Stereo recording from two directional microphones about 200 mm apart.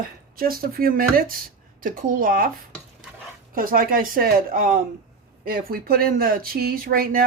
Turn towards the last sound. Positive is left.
turn(degrees=-45)  # may be behind; listen again after turning